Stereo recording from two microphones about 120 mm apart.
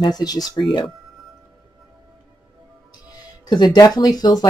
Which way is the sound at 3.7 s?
35° left (ahead or behind).